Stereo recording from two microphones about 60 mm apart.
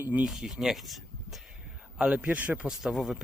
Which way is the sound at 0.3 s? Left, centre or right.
Centre.